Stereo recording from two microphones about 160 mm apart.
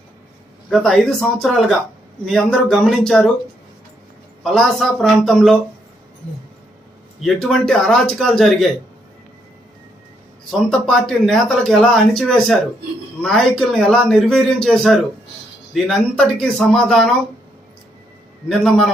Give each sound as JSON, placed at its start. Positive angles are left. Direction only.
{"t": 0.7, "sound": "speech", "side_deg": 0}
{"t": 4.5, "sound": "speech", "side_deg": 0}
{"t": 7.2, "sound": "speech", "side_deg": 0}
{"t": 10.5, "sound": "speech", "side_deg": 0}
{"t": 18.4, "sound": "speech", "side_deg": 0}